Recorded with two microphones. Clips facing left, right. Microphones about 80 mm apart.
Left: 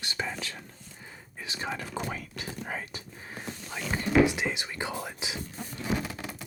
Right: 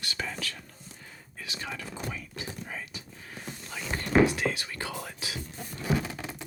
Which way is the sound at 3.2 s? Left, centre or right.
Left.